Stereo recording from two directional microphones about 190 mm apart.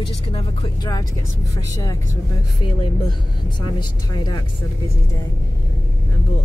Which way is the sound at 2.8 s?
25° left (ahead or behind).